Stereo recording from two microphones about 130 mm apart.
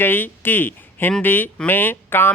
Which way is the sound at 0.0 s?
15° left (ahead or behind).